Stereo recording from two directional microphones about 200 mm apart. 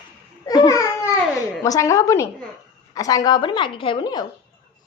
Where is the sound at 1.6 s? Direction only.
15° left (ahead or behind).